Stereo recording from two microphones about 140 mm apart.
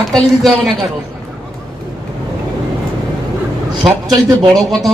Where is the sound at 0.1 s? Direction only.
Centre (ahead or behind).